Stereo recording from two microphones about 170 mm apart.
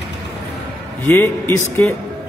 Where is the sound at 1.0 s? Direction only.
10° left (ahead or behind).